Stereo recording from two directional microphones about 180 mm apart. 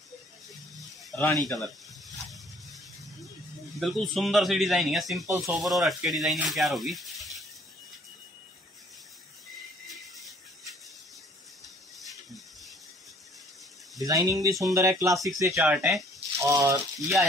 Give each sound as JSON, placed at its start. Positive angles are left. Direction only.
{"t": 1.1, "sound": "speech", "side_deg": 15}
{"t": 3.8, "sound": "a man's voice", "side_deg": 0}
{"t": 6.5, "sound": "a sound", "side_deg": 0}
{"t": 13.9, "sound": "speech", "side_deg": -20}